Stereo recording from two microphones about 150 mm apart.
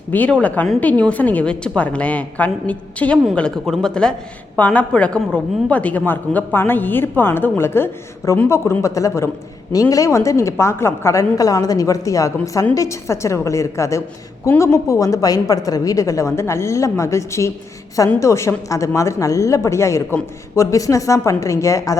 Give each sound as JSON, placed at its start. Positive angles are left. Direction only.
{"t": 0.1, "sound": "a woman's voice", "side_deg": 10}